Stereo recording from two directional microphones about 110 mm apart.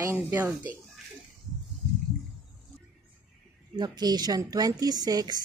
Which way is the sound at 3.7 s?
40° right (ahead or behind).